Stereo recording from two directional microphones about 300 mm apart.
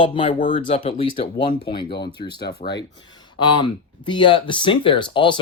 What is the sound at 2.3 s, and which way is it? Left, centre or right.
Speech, left.